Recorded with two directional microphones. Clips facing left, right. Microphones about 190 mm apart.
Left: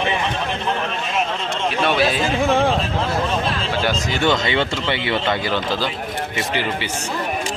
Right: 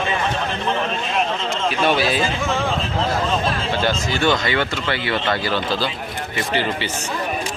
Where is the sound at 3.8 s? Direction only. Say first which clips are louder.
Even; 15° left (ahead or behind).